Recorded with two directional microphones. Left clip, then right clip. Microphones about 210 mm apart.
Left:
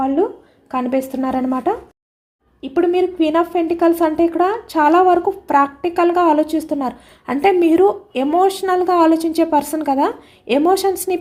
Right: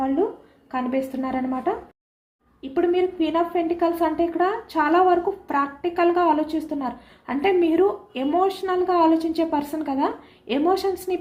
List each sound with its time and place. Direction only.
0.7 s a woman's voice: 55° left (ahead or behind)